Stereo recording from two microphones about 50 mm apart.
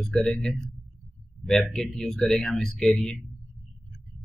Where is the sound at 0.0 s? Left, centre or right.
Centre.